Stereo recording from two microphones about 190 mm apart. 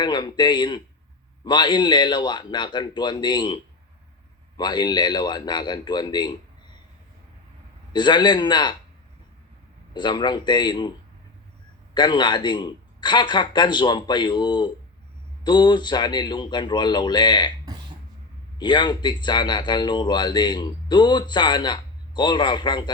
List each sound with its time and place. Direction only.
0.0 s speech: 20° left (ahead or behind)
7.9 s speech: 25° left (ahead or behind)
9.9 s speech: 25° left (ahead or behind)
11.9 s speech: 25° left (ahead or behind)
18.6 s speech: 25° left (ahead or behind)